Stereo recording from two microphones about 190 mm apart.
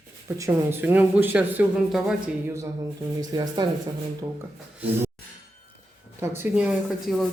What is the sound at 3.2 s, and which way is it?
Speech, 20° right (ahead or behind).